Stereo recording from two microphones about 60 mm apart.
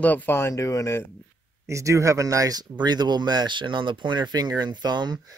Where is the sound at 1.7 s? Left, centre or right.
Right.